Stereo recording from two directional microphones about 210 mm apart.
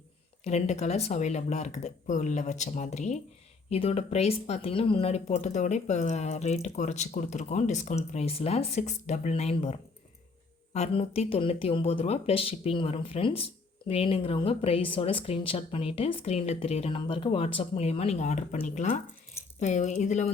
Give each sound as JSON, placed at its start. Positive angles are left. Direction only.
{"t": 0.4, "sound": "speech", "side_deg": 30}
{"t": 10.8, "sound": "speech", "side_deg": 30}